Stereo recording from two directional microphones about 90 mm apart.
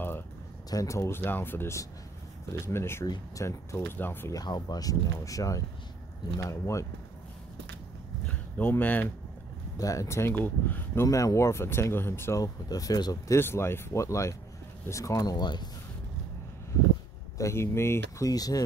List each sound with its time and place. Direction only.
0.7 s speech: 40° left (ahead or behind)
4.3 s speech: 45° left (ahead or behind)
8.3 s speech: 20° left (ahead or behind)
9.8 s speech: 40° left (ahead or behind); by 11.1 s 20° left (ahead or behind)
11.1 s speech: 35° left (ahead or behind)
12.6 s speech: 45° left (ahead or behind)
13.4 s speech: 25° left (ahead or behind); by 15.7 s 55° left (ahead or behind)
17.4 s speech: 30° left (ahead or behind)
18.3 s speech: 45° left (ahead or behind)